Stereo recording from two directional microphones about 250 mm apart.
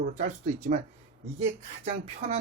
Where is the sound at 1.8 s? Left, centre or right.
Right.